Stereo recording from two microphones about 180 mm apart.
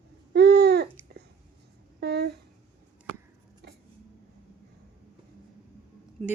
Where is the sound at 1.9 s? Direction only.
65° right (ahead or behind).